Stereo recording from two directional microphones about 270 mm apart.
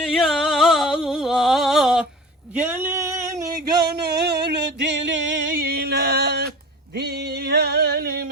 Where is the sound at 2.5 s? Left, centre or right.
Centre.